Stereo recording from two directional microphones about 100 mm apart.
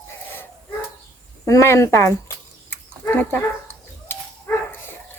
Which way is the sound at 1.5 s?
30° left (ahead or behind).